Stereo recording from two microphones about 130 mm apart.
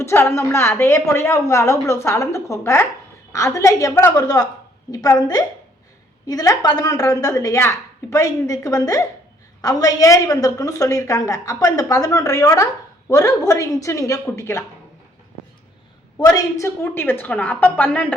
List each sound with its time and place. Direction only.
0.0 s a woman's voice: 20° left (ahead or behind)
16.2 s a woman's voice: 25° left (ahead or behind)